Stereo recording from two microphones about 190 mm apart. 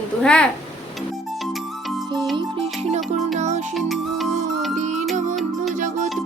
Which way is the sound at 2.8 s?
35° right (ahead or behind).